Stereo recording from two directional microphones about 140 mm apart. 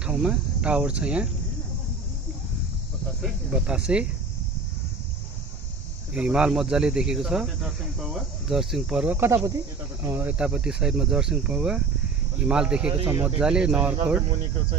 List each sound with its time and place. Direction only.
0.0 s speech: 5° right (ahead or behind)
3.2 s speech: 5° right (ahead or behind)
6.1 s speech: 5° right (ahead or behind)
9.1 s speech: 20° right (ahead or behind)